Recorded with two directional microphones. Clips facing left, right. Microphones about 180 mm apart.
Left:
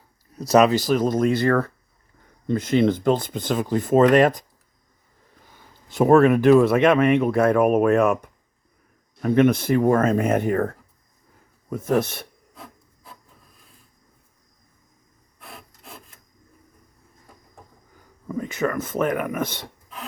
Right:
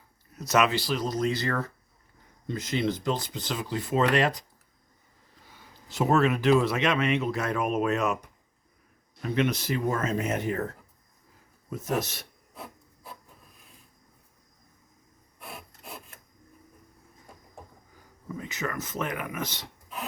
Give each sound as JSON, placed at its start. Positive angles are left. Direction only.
{"t": 0.3, "sound": "speech", "side_deg": 35}
{"t": 5.9, "sound": "speech", "side_deg": 55}
{"t": 15.4, "sound": "wood", "side_deg": -10}
{"t": 18.3, "sound": "speech", "side_deg": 55}